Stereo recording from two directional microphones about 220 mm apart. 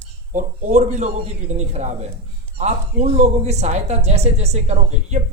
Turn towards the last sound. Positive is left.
turn(degrees=-30)  # may be behind; listen again after turning